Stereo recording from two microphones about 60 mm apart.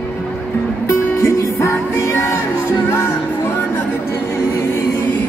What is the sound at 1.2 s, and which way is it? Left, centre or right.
Music, left.